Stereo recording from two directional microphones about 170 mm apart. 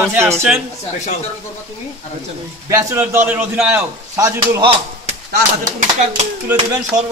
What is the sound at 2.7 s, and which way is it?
Speech, 20° right (ahead or behind).